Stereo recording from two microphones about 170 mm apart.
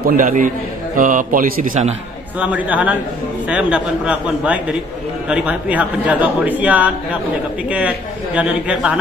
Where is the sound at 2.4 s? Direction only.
10° right (ahead or behind).